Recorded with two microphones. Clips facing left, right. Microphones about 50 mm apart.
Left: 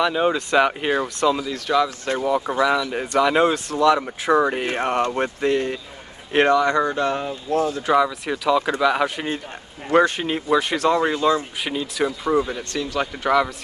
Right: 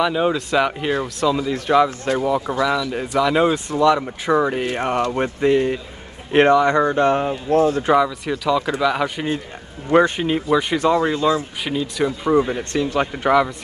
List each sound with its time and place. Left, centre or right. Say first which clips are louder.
0.0 s speech: right 1 dB; centre
1.5 s speech: right 4 dB; right
2.1 s speech: even; centre
2.6 s speech: even; centre
5.4 s a man's voice: right 7 dB; centre; by 7.3 s right
7.4 s speech: right 5 dB; right
8.3 s speech: even; centre
9.8 s a man's voice: right 2 dB; centre
10.2 s speech: right 2 dB; centre
12.4 s speech: right 4 dB; right